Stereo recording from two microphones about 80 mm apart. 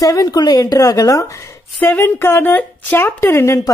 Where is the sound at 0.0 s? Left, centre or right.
Left.